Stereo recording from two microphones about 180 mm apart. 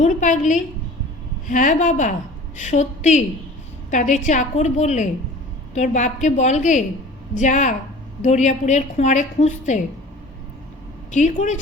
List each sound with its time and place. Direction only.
0.0 s a woman's voice: 45° left (ahead or behind)
11.1 s a woman's voice: 40° left (ahead or behind)